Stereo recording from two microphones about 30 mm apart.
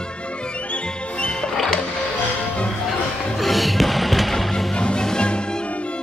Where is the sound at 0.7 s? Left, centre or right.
Left.